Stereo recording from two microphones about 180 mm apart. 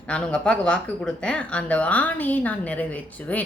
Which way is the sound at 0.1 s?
5° left (ahead or behind).